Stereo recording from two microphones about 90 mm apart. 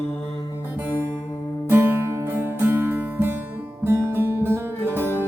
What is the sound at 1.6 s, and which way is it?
Music, 25° right (ahead or behind).